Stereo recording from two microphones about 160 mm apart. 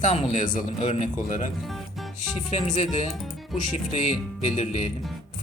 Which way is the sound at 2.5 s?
45° left (ahead or behind).